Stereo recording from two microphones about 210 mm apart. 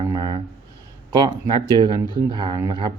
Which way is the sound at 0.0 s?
20° right (ahead or behind).